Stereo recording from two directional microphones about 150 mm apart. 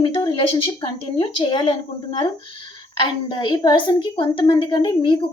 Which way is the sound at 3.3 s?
30° left (ahead or behind).